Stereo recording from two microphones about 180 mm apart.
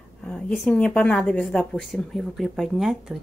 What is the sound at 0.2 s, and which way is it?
Speech, 5° left (ahead or behind).